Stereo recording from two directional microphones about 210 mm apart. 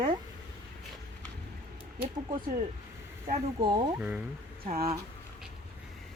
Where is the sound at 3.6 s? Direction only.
20° right (ahead or behind).